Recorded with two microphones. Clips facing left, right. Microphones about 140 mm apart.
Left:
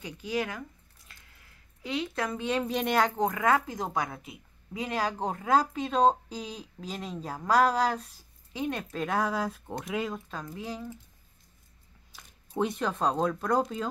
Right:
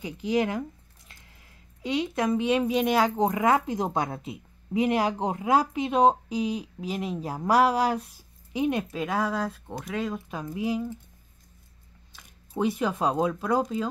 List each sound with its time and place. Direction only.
0.0 s a woman's voice: 20° right (ahead or behind)
8.9 s speech: 5° right (ahead or behind)
10.3 s a woman's voice: 15° right (ahead or behind)
12.5 s speech: 5° right (ahead or behind)